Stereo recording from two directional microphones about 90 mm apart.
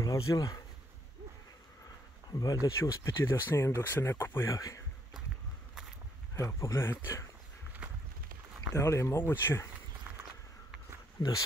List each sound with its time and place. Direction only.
0.0 s speech: 40° left (ahead or behind)
2.3 s speech: 40° left (ahead or behind)
6.3 s speech: 35° left (ahead or behind)
8.7 s speech: 35° left (ahead or behind)
10.1 s walk: 20° right (ahead or behind)
11.2 s speech: 45° left (ahead or behind)